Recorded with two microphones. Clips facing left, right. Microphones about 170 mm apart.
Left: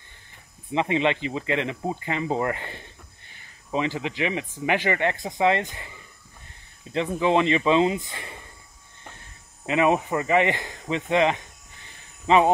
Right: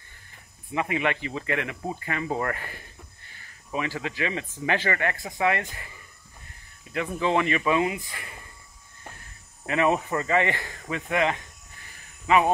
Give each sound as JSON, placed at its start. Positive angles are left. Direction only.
{"t": 0.7, "sound": "speech", "side_deg": 25}
{"t": 9.7, "sound": "speech", "side_deg": 20}